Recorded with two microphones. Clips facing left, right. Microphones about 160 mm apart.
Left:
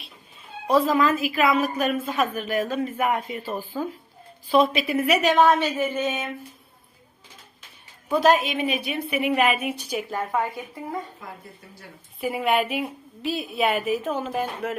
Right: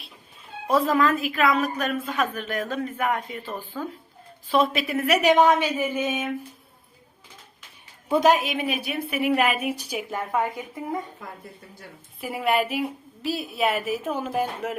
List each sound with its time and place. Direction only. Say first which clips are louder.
0.7 s a woman's voice: left 1 dB; centre (ahead or behind)
5.2 s speech: right 2 dB; 15° right (ahead or behind)
8.1 s a woman's voice: even; 15° right (ahead or behind)
12.2 s a woman's voice: left 1 dB; centre (ahead or behind)